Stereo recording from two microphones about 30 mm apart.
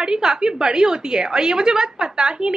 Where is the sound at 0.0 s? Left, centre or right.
Right.